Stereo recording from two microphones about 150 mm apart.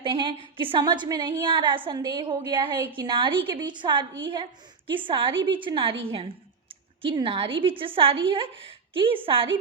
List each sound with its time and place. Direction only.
0.0 s a woman's voice: 35° right (ahead or behind)